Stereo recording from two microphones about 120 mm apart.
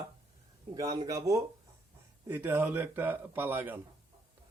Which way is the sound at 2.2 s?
15° right (ahead or behind).